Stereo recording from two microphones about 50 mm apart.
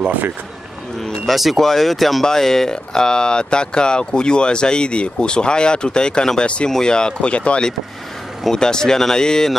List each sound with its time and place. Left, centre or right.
1.3 s speech: centre; by 7.6 s left
8.5 s speech: centre